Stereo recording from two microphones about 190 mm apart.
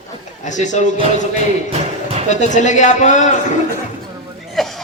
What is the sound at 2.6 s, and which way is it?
Music, 40° left (ahead or behind).